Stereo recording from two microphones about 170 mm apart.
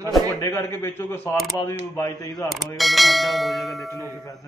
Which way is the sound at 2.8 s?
Centre (ahead or behind).